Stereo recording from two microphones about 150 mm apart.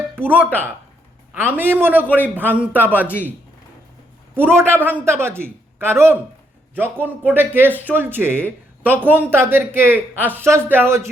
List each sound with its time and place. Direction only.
0.2 s speech: 10° right (ahead or behind)
4.5 s speech: 15° right (ahead or behind)